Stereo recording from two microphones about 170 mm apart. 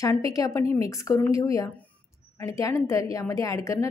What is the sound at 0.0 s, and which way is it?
A woman's voice, 20° left (ahead or behind).